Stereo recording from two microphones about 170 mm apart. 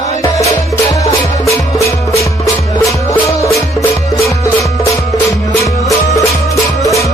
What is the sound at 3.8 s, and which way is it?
Music, 20° left (ahead or behind).